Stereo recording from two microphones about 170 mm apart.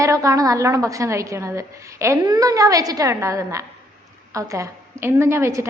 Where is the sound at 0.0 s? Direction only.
20° right (ahead or behind).